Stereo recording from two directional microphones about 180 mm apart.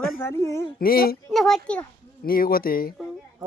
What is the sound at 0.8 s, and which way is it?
Speech, 55° left (ahead or behind).